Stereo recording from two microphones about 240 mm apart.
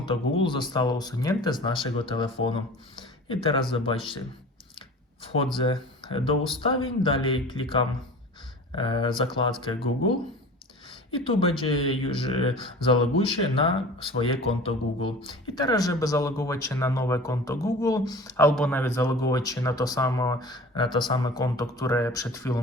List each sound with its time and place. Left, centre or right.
0.4 s speech: centre
5.6 s speech: left
10.8 s speech: left